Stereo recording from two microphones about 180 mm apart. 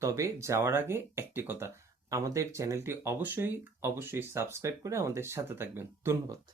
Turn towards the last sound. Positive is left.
turn(degrees=-15)  # may be behind; listen again after turning